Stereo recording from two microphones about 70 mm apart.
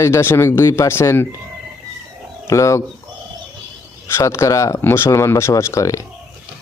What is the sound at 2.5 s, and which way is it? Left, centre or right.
Speech, left.